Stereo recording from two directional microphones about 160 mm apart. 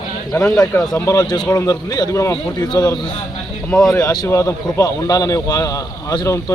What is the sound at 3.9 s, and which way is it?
A man's voice, 20° left (ahead or behind).